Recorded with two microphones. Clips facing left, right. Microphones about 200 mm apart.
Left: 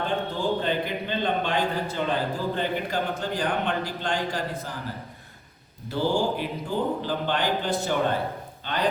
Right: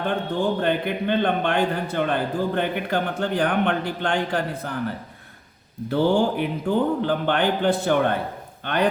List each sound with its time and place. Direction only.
0.3 s a man's voice: 55° right (ahead or behind)